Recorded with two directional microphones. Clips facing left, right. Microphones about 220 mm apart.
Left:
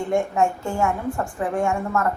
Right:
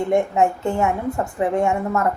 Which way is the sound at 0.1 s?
20° right (ahead or behind).